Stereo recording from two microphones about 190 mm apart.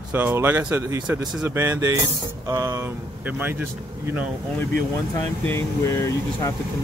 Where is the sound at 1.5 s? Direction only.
15° right (ahead or behind).